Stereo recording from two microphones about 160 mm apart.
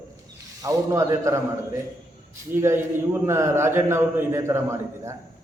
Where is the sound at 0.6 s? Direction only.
20° right (ahead or behind).